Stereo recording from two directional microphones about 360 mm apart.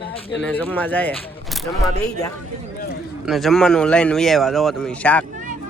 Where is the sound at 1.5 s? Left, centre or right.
Centre.